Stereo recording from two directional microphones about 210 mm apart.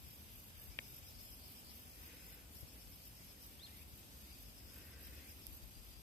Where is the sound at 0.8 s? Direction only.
10° left (ahead or behind).